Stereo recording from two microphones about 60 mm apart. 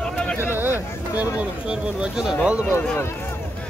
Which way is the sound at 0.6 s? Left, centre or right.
Right.